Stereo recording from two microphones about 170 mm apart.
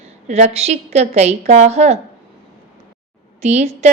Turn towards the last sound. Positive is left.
turn(degrees=-40)  # may be behind; listen again after turning